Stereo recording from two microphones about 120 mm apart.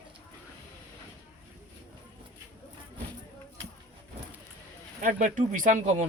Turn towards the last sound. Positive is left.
turn(degrees=-85)